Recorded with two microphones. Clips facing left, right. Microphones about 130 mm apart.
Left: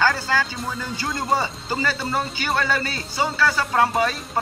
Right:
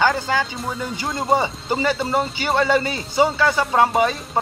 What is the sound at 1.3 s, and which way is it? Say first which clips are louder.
Speech: right 5 dB; 20° right (ahead or behind).